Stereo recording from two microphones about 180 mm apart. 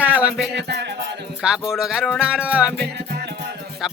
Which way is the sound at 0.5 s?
70° right (ahead or behind).